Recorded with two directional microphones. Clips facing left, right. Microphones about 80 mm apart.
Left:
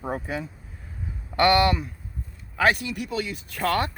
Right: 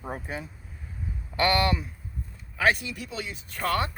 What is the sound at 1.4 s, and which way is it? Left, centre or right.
Speech, left.